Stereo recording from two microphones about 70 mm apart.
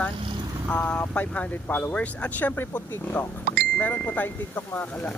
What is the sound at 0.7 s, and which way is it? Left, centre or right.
Speech, left.